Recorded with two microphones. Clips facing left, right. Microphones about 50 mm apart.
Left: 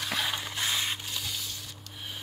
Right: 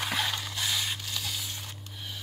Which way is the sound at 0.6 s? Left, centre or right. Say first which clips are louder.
Left 1 dB; left.